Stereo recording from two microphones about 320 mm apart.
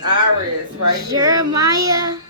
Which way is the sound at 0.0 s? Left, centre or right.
Right.